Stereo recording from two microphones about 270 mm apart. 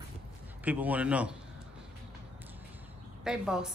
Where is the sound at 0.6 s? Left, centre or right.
Centre.